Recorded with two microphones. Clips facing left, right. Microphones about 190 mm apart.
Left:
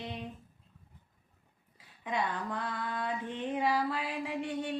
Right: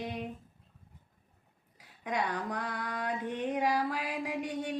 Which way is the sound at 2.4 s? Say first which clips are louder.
Even; 15° right (ahead or behind).